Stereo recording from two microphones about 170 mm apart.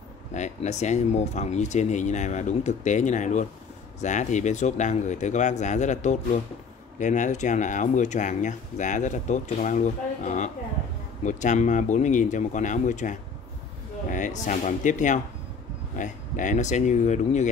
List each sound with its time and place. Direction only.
0.3 s speech: 45° left (ahead or behind)